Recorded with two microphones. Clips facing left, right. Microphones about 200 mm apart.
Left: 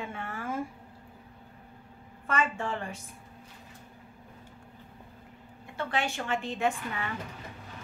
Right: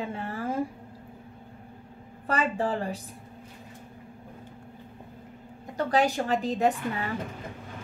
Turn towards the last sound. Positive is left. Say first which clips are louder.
# right 5 dB
turn(degrees=-35)  # may be behind; listen again after turning